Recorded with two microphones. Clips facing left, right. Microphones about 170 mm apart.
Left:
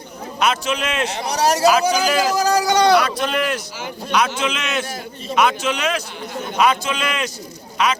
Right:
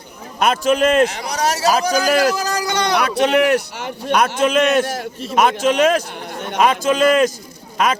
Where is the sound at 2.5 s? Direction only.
10° left (ahead or behind).